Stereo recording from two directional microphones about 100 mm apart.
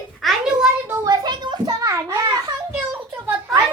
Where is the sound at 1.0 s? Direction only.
40° right (ahead or behind).